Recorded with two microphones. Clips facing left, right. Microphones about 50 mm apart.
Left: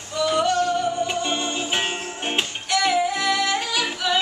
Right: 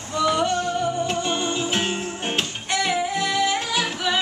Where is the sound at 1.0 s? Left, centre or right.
Centre.